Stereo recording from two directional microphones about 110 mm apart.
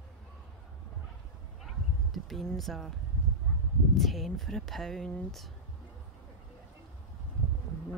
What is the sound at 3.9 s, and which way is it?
Speech, centre (ahead or behind).